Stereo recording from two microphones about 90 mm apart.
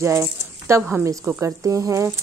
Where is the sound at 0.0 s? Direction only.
30° right (ahead or behind).